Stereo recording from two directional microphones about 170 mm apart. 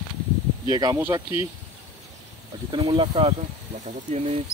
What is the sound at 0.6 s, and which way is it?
Speech, 20° right (ahead or behind).